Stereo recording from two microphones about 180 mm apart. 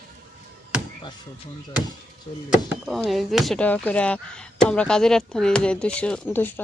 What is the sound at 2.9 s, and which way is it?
Speech, centre (ahead or behind).